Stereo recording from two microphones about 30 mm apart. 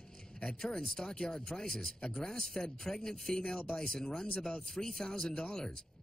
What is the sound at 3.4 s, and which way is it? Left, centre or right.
A woman's voice, left.